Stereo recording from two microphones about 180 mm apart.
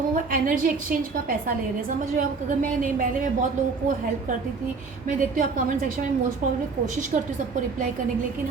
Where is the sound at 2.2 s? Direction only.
50° right (ahead or behind).